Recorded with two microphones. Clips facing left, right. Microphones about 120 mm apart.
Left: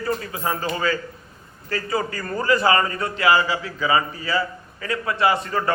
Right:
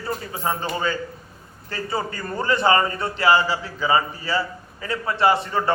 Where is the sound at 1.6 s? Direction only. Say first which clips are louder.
Left 2 dB; 25° right (ahead or behind).